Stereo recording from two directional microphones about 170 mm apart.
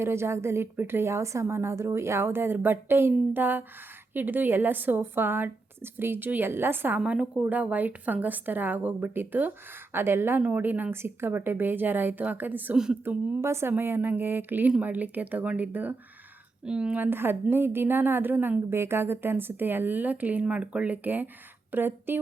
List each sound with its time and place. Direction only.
0.0 s a woman's voice: 15° right (ahead or behind)